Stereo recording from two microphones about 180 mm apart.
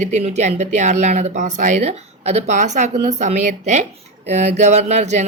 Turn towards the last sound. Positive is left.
turn(degrees=-40)  # may be behind; listen again after turning